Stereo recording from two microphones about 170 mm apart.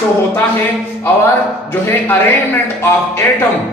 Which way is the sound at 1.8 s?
15° left (ahead or behind).